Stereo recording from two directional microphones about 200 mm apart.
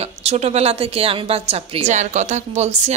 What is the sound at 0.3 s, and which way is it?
A woman's voice, 30° right (ahead or behind).